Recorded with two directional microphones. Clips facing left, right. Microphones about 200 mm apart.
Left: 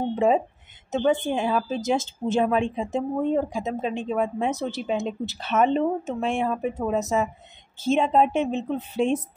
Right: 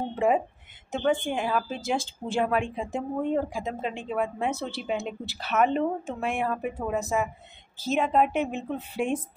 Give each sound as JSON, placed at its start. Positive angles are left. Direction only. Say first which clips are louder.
{"t": 1.0, "sound": "a woman's voice", "louder": "left 3 dB", "side_deg": 25}